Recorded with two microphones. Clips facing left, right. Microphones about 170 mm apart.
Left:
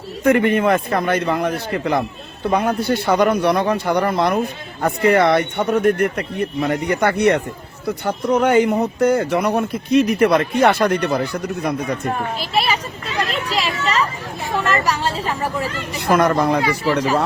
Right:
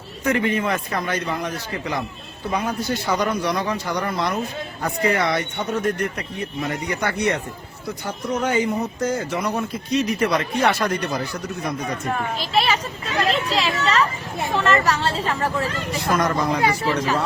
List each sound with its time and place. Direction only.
0.3 s a man's voice: 55° left (ahead or behind)
12.4 s speech: 10° left (ahead or behind)
16.0 s a man's voice: 60° left (ahead or behind)